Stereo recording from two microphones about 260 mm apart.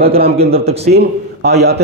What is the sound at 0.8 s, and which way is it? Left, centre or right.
Speech, right.